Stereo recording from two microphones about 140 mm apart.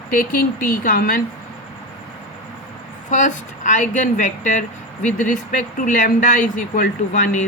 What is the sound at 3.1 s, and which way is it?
A woman's voice, 65° left (ahead or behind).